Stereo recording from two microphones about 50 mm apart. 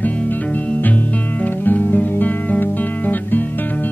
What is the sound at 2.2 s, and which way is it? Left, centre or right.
Guitar, left.